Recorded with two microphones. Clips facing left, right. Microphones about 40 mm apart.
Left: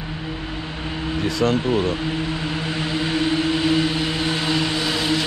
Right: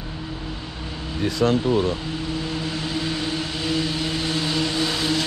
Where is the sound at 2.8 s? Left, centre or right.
Left.